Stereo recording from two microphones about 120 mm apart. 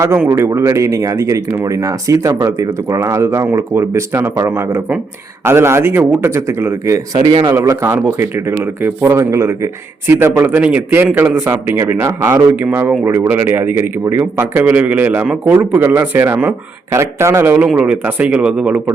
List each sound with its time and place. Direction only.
0.3 s a man's voice: 25° right (ahead or behind)